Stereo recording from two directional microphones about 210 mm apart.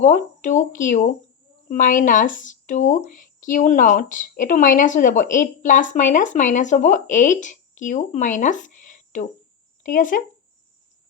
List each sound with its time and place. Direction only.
0.0 s speech: 35° left (ahead or behind)